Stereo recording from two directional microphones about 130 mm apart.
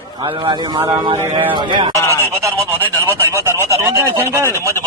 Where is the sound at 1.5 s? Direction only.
40° right (ahead or behind).